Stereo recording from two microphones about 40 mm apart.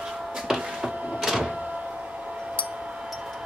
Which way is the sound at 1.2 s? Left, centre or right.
Centre.